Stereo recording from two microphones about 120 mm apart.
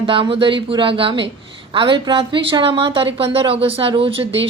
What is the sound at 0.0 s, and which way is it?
A woman's voice, 45° right (ahead or behind).